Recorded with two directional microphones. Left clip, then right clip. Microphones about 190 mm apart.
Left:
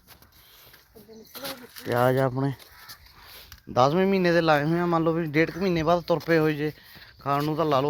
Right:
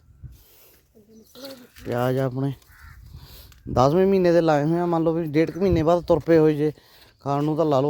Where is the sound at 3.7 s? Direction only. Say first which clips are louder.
Right 3 dB; 70° right (ahead or behind).